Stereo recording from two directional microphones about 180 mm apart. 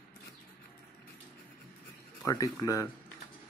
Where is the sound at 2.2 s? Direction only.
20° left (ahead or behind).